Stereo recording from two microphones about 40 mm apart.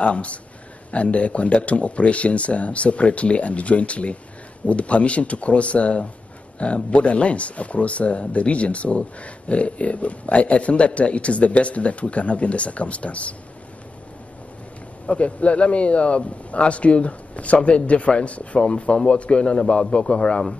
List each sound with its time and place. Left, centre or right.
0.0 s speech: left
15.0 s a man's voice: left